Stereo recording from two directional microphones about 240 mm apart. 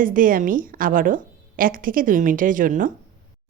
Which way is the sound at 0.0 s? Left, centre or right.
Right.